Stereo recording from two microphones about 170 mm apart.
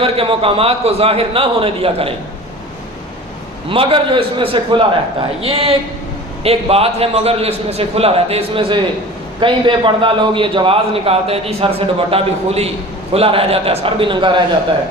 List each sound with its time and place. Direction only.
0.0 s a man's voice: 35° right (ahead or behind)
3.7 s a man's voice: 30° right (ahead or behind)